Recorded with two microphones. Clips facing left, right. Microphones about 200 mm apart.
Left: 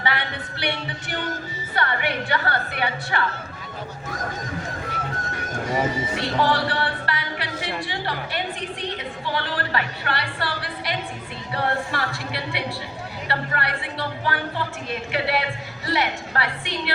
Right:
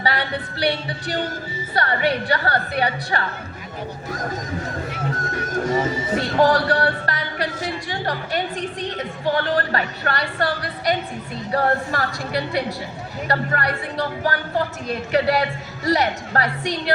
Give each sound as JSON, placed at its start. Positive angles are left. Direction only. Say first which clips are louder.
{"t": 0.0, "sound": "music", "louder": "right 3 dB", "side_deg": -35}
{"t": 1.7, "sound": "a woman's voice", "louder": "right 4 dB", "side_deg": -40}
{"t": 6.1, "sound": "a sound", "louder": "right 6 dB", "side_deg": -45}
{"t": 9.2, "sound": "a woman's voice", "louder": "right 8 dB", "side_deg": -45}